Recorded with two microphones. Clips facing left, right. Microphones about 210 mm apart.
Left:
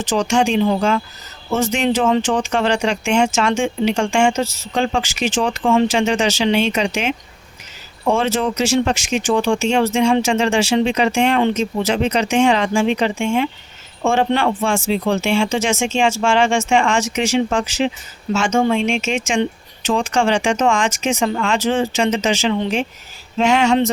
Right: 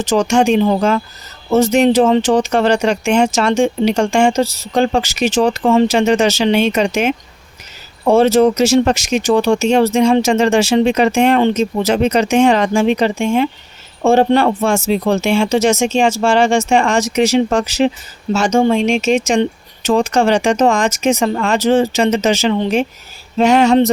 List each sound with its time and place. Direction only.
0.0 s speech: 45° right (ahead or behind)